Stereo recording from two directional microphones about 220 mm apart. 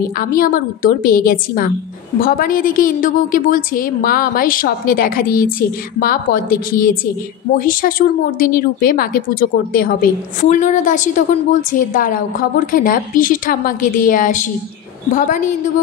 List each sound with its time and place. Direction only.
0.2 s speech: 40° left (ahead or behind)